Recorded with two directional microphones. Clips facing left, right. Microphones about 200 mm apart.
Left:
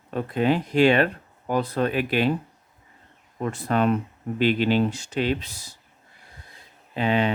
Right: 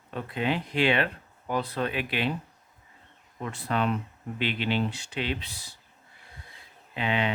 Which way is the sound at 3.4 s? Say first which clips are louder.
Left 6 dB; 45° left (ahead or behind).